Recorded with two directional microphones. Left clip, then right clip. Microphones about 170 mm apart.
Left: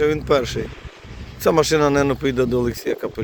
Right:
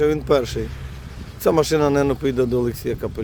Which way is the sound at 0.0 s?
35° right (ahead or behind).